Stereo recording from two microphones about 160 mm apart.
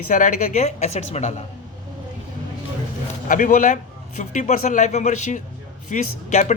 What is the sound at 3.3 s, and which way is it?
Speech, 55° left (ahead or behind).